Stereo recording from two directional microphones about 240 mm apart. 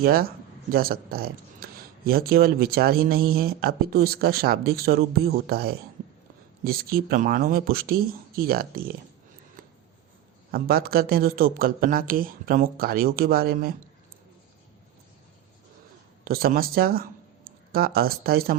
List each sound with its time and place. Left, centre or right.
0.0 s speech: right
9.6 s a sound: right
10.5 s speech: right
16.2 s speech: right